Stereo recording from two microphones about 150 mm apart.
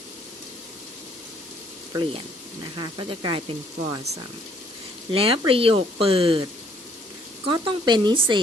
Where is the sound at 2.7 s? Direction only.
30° right (ahead or behind).